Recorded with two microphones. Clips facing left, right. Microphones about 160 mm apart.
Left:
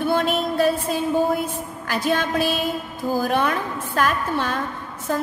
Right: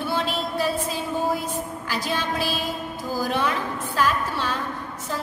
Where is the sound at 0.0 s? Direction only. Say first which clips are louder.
Left 5 dB; 50° left (ahead or behind).